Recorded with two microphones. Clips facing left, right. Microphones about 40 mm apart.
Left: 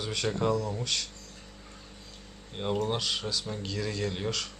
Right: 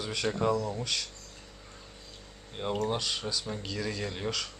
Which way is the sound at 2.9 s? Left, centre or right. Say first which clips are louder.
Left 1 dB; centre.